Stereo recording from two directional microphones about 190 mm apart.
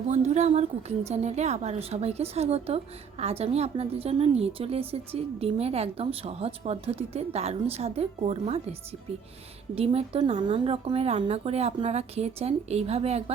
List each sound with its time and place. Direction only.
0.1 s a woman's voice: 35° right (ahead or behind)
9.7 s a woman's voice: 30° right (ahead or behind)